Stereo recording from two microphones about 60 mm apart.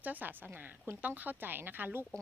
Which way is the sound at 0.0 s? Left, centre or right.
Right.